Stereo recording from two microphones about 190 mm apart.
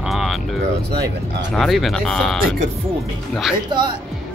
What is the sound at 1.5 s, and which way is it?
Speech, centre (ahead or behind).